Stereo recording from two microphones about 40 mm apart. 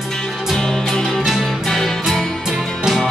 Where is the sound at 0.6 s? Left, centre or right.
Centre.